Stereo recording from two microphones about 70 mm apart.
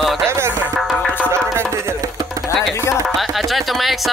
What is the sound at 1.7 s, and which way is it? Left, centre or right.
Music, right.